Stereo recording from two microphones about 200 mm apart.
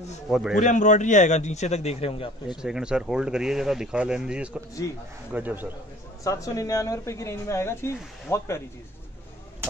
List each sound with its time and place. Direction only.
0.3 s speech: 5° right (ahead or behind)
0.6 s a man's voice: 40° left (ahead or behind)
2.4 s a man's voice: 5° right (ahead or behind)
6.2 s speech: 15° left (ahead or behind)